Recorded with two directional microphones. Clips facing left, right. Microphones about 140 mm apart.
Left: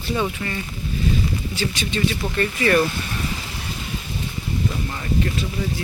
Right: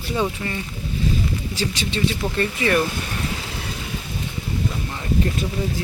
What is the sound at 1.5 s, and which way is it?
Speech, 30° right (ahead or behind).